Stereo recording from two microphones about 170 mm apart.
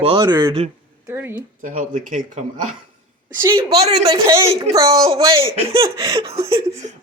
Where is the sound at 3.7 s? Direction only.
40° right (ahead or behind).